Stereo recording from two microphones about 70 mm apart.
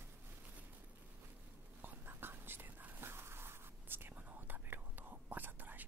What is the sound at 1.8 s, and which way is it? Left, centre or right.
Whispering, right.